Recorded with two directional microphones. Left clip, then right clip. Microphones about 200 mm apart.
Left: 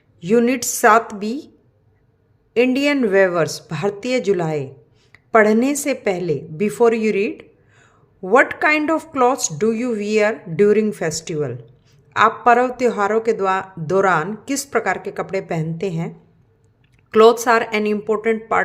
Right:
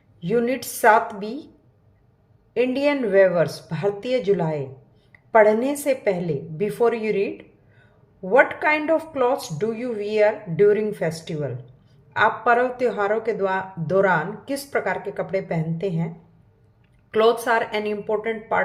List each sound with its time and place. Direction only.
0.2 s speech: 35° left (ahead or behind)
2.5 s a woman's voice: 30° left (ahead or behind)